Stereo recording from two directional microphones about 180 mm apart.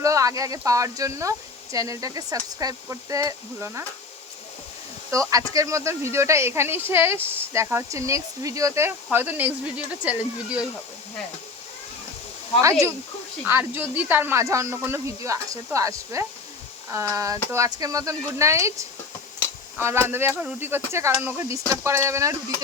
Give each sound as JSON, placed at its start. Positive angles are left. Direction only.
{"t": 0.0, "sound": "speech", "side_deg": -15}
{"t": 5.3, "sound": "speech", "side_deg": -20}
{"t": 13.4, "sound": "speech", "side_deg": -10}